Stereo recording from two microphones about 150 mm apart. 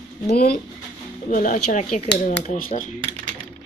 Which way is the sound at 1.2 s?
65° left (ahead or behind).